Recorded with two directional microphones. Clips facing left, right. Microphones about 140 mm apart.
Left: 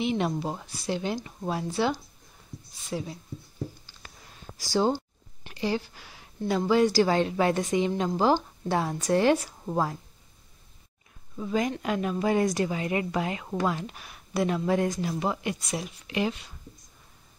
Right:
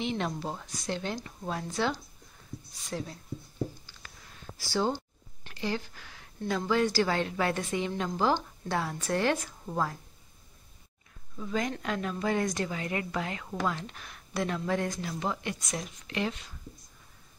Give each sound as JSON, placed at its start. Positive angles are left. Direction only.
{"t": 0.0, "sound": "speech", "side_deg": 15}
{"t": 2.9, "sound": "speech", "side_deg": 10}
{"t": 4.9, "sound": "speech", "side_deg": 15}
{"t": 11.3, "sound": "speech", "side_deg": 20}